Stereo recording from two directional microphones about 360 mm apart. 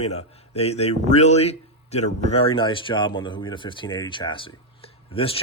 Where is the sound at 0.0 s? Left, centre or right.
Centre.